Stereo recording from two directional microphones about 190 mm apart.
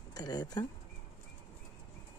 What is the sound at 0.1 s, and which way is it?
Speech, 20° left (ahead or behind).